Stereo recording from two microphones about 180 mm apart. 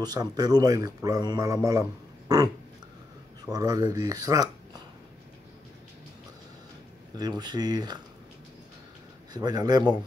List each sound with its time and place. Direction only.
0.0 s a man's voice: 20° right (ahead or behind)
3.5 s a man's voice: 20° right (ahead or behind)
7.2 s a man's voice: 20° right (ahead or behind)
9.3 s a man's voice: 25° right (ahead or behind)